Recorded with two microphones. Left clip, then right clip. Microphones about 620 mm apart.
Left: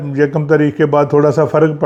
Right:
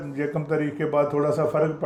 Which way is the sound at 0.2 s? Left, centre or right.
Left.